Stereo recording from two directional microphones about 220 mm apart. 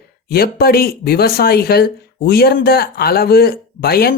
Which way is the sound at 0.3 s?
45° left (ahead or behind).